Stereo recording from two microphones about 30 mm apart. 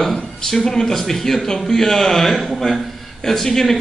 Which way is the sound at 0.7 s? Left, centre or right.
Centre.